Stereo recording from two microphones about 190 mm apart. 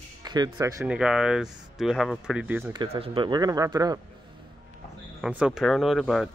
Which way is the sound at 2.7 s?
25° right (ahead or behind).